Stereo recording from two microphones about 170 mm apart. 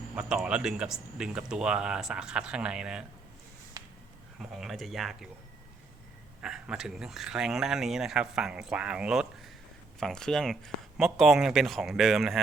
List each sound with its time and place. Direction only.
0.2 s speech: 5° right (ahead or behind)
3.8 s a sound: 20° right (ahead or behind)
4.4 s speech: centre (ahead or behind)
6.4 s speech: 5° right (ahead or behind)